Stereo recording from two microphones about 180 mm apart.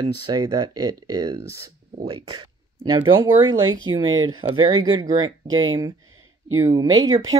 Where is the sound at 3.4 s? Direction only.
90° right.